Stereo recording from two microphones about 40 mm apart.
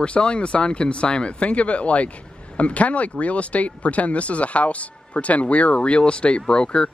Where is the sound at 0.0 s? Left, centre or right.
Left.